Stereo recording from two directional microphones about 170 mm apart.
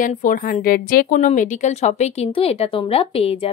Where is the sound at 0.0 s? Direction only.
50° left (ahead or behind).